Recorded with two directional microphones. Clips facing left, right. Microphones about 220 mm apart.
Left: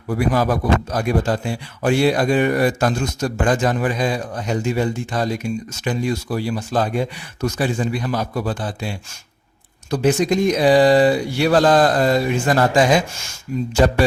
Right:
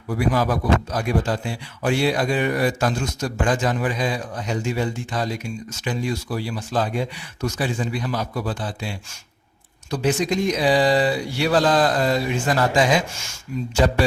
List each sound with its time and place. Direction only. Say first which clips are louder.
0.1 s speech: left 3 dB; 50° left (ahead or behind)